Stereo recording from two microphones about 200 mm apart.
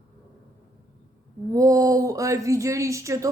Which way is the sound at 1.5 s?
15° right (ahead or behind).